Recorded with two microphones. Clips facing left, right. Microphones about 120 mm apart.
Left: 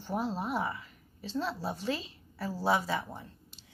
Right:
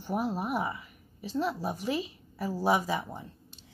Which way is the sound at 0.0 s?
15° right (ahead or behind).